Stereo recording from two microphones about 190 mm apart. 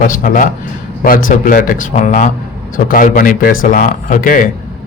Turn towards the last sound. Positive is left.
turn(degrees=45)  # may be behind; listen again after turning